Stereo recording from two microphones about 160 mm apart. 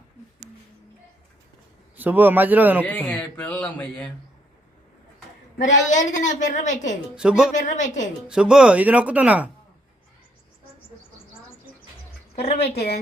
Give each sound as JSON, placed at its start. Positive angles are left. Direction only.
{"t": 2.0, "sound": "speech", "side_deg": -10}
{"t": 2.8, "sound": "speech", "side_deg": 10}
{"t": 5.5, "sound": "a woman's voice", "side_deg": 50}
{"t": 7.2, "sound": "speech", "side_deg": -5}
{"t": 7.5, "sound": "a woman's voice", "side_deg": 50}
{"t": 8.3, "sound": "speech", "side_deg": -5}
{"t": 12.4, "sound": "a woman's voice", "side_deg": 40}